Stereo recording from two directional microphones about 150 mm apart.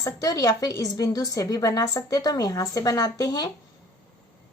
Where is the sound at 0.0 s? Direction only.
25° left (ahead or behind).